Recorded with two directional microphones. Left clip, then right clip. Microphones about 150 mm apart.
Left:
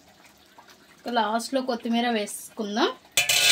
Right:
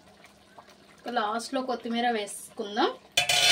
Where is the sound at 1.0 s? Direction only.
60° left (ahead or behind).